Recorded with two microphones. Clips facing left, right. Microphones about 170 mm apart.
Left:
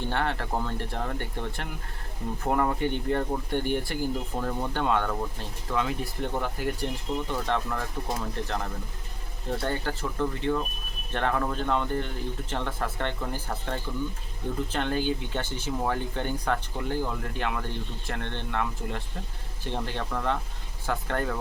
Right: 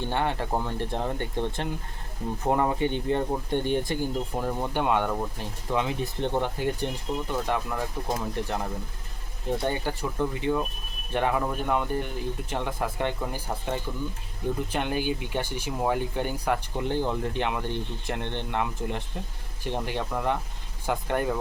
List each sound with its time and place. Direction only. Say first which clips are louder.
0.1 s speech: right 3 dB; 15° right (ahead or behind)